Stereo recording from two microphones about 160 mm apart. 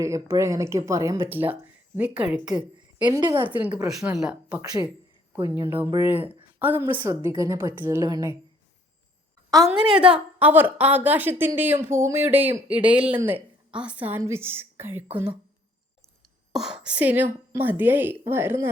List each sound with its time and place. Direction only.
0.0 s a woman's voice: 20° right (ahead or behind)
2.4 s a woman's voice: 30° right (ahead or behind)
3.3 s a woman's voice: 10° right (ahead or behind)
5.7 s a woman's voice: 15° right (ahead or behind)
9.9 s a woman's voice: 5° right (ahead or behind)
16.5 s a woman's voice: 5° right (ahead or behind)